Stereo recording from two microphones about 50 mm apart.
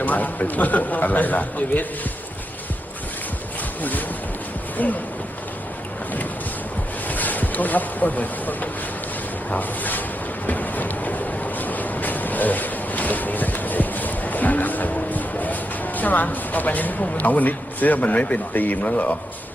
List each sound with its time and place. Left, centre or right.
0.0 s speech: left
4.8 s speech: left
7.1 s speech: left
10.4 s vehicle: left
15.1 s a sound: left
16.0 s speech: left